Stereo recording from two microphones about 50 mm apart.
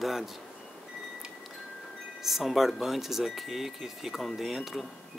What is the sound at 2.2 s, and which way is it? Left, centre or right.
Speech, centre.